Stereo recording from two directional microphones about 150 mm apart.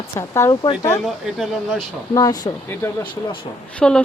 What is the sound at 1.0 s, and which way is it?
Speech, centre (ahead or behind).